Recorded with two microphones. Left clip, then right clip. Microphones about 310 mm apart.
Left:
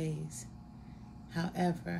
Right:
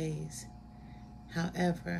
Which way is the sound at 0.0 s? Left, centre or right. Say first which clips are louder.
Right 1 dB; centre.